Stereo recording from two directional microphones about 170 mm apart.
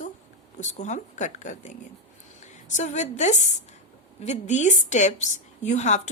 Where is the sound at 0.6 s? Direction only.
45° left (ahead or behind).